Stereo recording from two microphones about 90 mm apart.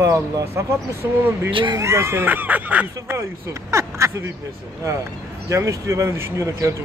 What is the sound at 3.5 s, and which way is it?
Speech, 35° right (ahead or behind).